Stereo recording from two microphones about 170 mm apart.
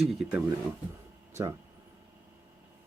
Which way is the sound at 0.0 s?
5° right (ahead or behind).